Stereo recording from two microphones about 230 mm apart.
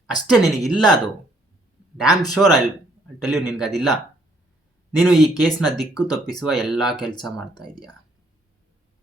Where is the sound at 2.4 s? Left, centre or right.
Centre.